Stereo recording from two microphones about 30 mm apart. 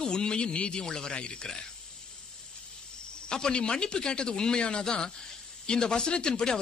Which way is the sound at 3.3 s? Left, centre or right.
Left.